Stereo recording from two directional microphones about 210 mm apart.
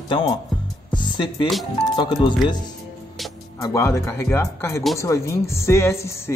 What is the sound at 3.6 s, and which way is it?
Speech, 15° left (ahead or behind).